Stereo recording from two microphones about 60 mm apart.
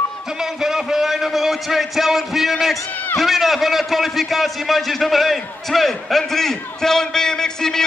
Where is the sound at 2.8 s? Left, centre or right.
Left.